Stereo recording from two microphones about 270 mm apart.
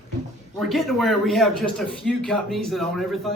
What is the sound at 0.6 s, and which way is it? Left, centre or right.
Speech, centre.